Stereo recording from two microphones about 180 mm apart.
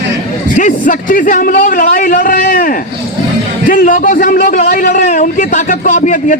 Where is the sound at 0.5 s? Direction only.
45° left (ahead or behind).